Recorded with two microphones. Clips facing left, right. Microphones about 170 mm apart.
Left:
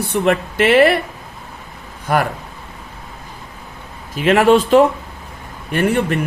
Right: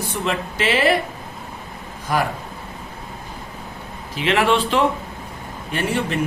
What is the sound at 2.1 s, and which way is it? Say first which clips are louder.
Speech: left 4 dB; 60° left (ahead or behind).